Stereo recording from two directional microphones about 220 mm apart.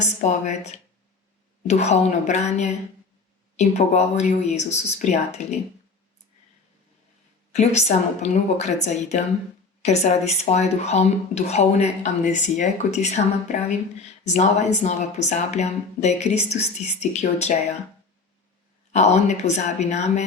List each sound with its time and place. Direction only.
0.0 s speech: 30° left (ahead or behind)
7.5 s speech: 30° left (ahead or behind)
18.9 s speech: 30° left (ahead or behind)